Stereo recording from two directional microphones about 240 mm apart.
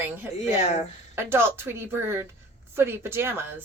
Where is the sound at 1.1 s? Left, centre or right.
Centre.